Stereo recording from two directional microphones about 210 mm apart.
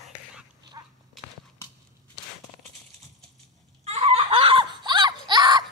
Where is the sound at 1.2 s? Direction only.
Centre (ahead or behind).